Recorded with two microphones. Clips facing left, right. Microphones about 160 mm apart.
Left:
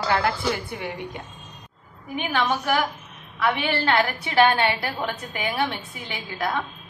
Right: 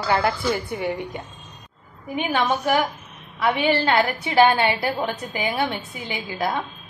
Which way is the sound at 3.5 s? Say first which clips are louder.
Right 3 dB; 15° right (ahead or behind).